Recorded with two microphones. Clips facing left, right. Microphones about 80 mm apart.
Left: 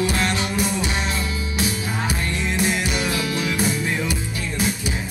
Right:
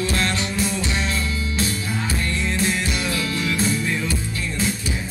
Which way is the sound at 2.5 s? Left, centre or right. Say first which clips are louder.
Left 3 dB; centre.